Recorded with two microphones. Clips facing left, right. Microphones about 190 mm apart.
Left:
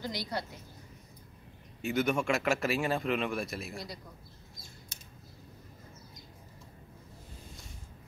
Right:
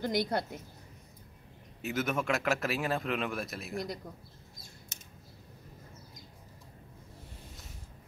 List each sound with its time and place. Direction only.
0.0 s a woman's voice: 55° right (ahead or behind)
1.8 s speech: centre (ahead or behind)